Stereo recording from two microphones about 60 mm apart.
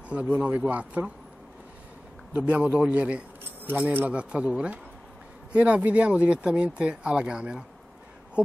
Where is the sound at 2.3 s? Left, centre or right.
Right.